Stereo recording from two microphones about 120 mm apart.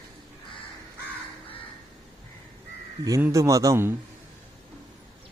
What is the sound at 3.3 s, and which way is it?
Speech, 25° right (ahead or behind).